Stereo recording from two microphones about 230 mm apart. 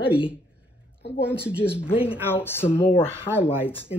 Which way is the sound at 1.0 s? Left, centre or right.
Left.